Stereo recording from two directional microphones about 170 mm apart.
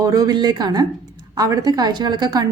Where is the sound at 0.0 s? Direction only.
20° right (ahead or behind).